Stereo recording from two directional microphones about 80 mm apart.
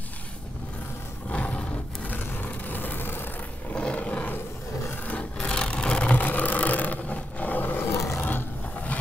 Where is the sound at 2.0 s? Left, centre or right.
Left.